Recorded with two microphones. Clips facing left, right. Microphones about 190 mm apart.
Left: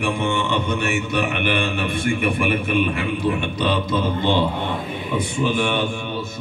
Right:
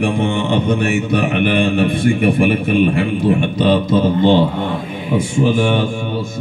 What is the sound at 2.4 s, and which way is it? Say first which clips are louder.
A man's voice: right 6 dB; 45° right (ahead or behind).